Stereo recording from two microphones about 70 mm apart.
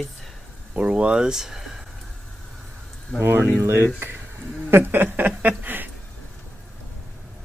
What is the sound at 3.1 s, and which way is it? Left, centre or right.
Speech, right.